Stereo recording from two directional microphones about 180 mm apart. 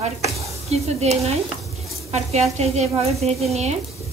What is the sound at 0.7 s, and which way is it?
A woman's voice, 35° right (ahead or behind).